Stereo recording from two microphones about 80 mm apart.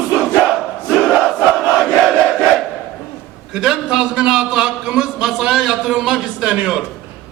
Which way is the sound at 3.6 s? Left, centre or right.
Centre.